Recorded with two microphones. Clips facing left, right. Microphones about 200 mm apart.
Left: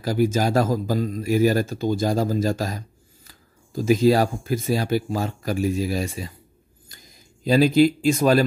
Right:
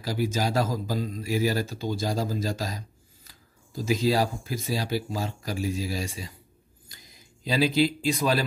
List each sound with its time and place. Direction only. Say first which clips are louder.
0.0 s speech: left 6 dB; 50° left (ahead or behind)
7.4 s speech: left 7 dB; 50° left (ahead or behind)